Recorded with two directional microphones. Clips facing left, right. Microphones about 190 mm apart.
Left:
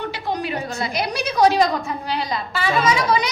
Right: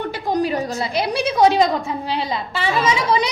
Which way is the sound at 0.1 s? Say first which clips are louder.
Right 5 dB; 40° right (ahead or behind).